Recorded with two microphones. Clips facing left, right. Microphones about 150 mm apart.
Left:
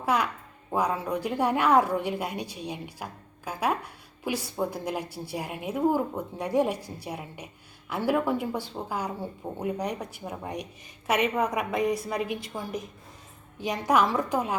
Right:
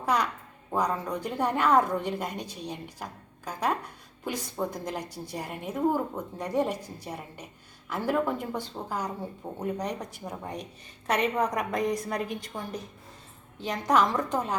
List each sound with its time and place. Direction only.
0.0 s a woman's voice: 5° left (ahead or behind)